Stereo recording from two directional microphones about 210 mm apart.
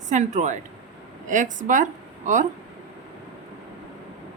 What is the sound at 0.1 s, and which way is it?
A woman's voice, 35° right (ahead or behind).